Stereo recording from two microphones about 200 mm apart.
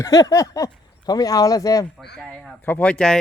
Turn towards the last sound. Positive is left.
turn(degrees=0)  # may be behind; listen again after turning